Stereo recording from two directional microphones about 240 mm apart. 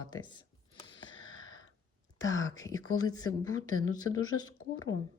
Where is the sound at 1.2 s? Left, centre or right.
Left.